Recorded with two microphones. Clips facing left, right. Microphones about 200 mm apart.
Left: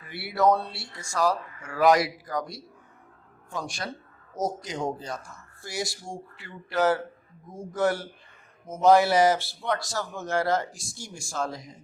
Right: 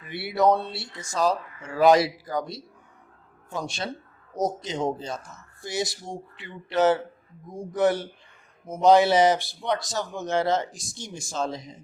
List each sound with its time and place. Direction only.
0.0 s a man's voice: 20° right (ahead or behind)
4.4 s a man's voice: 20° right (ahead or behind)